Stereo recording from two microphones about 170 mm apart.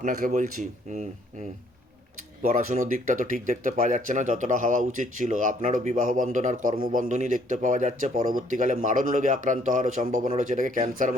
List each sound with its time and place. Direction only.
0.0 s speech: 50° right (ahead or behind)
2.5 s speech: 55° right (ahead or behind)